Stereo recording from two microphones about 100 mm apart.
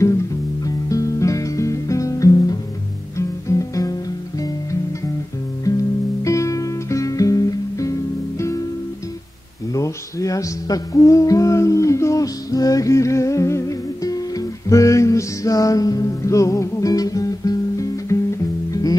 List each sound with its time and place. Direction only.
0.8 s music: 35° left (ahead or behind)
5.7 s music: 35° left (ahead or behind)
6.2 s guitar: 30° left (ahead or behind)
9.8 s music: 35° left (ahead or behind)